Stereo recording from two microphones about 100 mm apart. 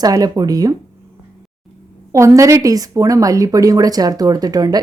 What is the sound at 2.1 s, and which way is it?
A woman's voice, 30° right (ahead or behind).